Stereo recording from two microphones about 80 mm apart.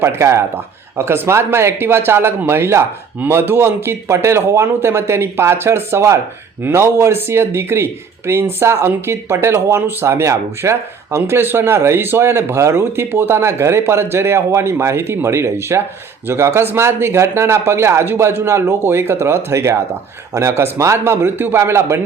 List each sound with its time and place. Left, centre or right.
0.0 s speech: right